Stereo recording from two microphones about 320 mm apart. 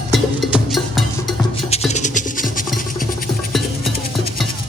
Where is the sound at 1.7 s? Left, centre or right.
Left.